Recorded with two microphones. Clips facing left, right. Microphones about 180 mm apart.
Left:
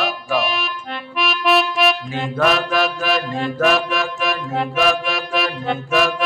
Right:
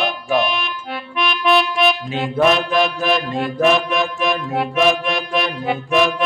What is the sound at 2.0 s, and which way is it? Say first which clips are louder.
Speech: right 3 dB; 20° right (ahead or behind).